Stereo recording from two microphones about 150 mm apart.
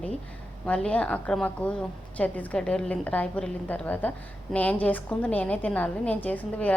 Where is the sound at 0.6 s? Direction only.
5° left (ahead or behind).